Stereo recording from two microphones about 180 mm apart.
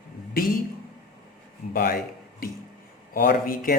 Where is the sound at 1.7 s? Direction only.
55° left (ahead or behind).